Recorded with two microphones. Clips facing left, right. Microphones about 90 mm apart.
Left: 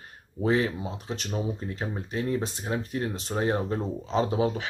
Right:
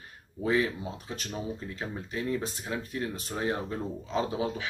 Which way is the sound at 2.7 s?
35° left (ahead or behind).